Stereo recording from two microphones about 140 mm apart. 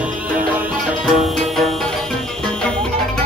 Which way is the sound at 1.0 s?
Centre (ahead or behind).